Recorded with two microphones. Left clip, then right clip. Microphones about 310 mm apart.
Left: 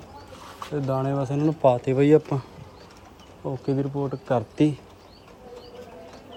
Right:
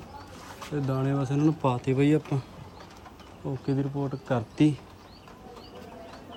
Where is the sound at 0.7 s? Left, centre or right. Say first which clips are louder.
Left 4 dB; left.